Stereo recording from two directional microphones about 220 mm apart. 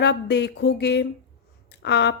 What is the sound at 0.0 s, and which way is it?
Speech, 50° left (ahead or behind).